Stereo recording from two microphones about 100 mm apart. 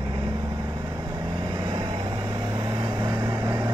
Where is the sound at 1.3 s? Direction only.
55° right (ahead or behind).